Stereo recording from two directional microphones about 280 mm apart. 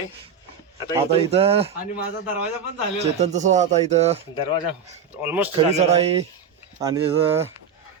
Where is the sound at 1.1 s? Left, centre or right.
Right.